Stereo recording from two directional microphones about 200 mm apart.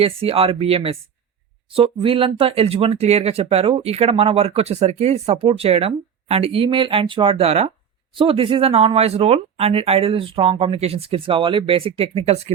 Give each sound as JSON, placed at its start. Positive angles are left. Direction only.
{"t": 0.0, "sound": "speech", "side_deg": -30}